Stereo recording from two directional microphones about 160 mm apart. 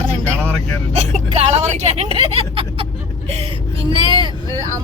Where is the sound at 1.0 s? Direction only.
40° right (ahead or behind).